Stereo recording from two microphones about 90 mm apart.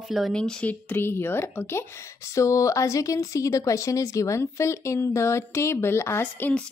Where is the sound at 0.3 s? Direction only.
10° left (ahead or behind); by 6.5 s 25° left (ahead or behind).